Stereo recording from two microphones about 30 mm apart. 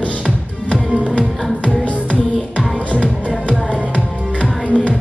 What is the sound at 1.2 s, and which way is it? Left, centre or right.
Music, left.